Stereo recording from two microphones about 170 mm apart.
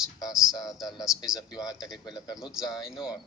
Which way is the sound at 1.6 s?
20° left (ahead or behind).